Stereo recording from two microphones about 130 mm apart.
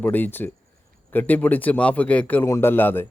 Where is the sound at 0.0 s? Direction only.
15° left (ahead or behind).